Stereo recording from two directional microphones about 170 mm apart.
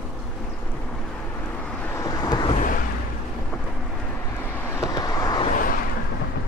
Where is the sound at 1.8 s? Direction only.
15° left (ahead or behind).